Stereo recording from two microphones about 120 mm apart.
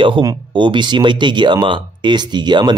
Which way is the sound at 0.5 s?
40° right (ahead or behind).